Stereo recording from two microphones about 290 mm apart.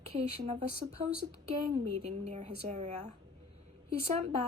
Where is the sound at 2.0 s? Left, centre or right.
Right.